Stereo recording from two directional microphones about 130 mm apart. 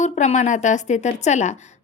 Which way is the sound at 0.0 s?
65° left (ahead or behind).